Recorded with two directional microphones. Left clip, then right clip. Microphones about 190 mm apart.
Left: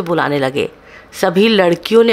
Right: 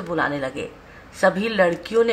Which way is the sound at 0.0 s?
45° left (ahead or behind).